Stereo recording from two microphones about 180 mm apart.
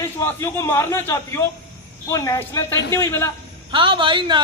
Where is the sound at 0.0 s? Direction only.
15° left (ahead or behind).